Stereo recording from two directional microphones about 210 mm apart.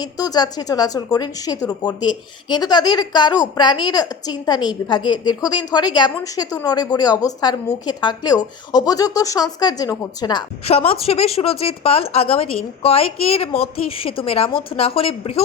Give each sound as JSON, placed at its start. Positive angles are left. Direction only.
{"t": 0.0, "sound": "a woman's voice", "side_deg": 20}